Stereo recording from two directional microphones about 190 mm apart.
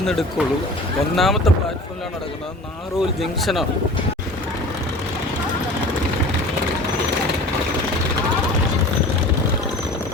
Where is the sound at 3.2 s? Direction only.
Centre (ahead or behind).